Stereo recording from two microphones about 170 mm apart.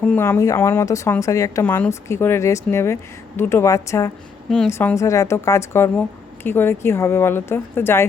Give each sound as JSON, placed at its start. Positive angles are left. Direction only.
{"t": 0.0, "sound": "speech", "side_deg": 10}
{"t": 4.4, "sound": "a woman's voice", "side_deg": 0}
{"t": 4.7, "sound": "speech", "side_deg": 15}